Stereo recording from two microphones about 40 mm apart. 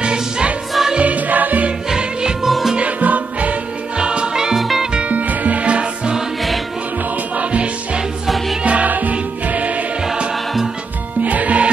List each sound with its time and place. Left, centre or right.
0.0 s music: right
0.9 s music: right
2.4 s music: centre
2.8 s music: right
4.0 s music: right
4.6 s music: centre
4.9 s music: right
7.3 s music: right
11.2 s music: right